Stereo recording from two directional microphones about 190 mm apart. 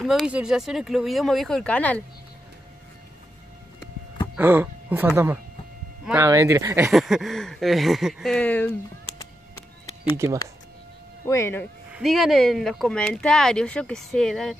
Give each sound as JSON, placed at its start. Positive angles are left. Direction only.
{"t": 0.0, "sound": "speech", "side_deg": 0}
{"t": 4.4, "sound": "speech", "side_deg": -10}
{"t": 6.9, "sound": "speech", "side_deg": 0}
{"t": 10.1, "sound": "speech", "side_deg": -15}
{"t": 11.2, "sound": "speech", "side_deg": 15}
{"t": 11.9, "sound": "speech", "side_deg": 0}